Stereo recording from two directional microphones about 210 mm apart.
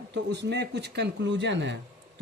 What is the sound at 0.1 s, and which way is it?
Speech, 55° right (ahead or behind).